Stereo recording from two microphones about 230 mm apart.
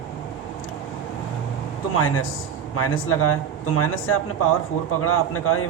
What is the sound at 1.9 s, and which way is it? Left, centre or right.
Speech, left.